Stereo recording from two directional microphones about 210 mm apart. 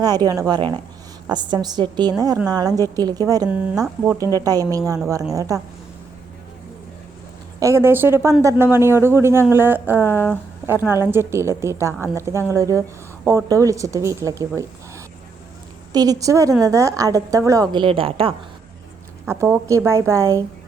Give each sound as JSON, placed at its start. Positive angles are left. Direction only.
{"t": 0.0, "sound": "a woman's voice", "side_deg": -20}
{"t": 3.5, "sound": "speech", "side_deg": -5}
{"t": 4.4, "sound": "speech", "side_deg": -15}
{"t": 7.6, "sound": "speech", "side_deg": -15}
{"t": 19.2, "sound": "speech", "side_deg": -10}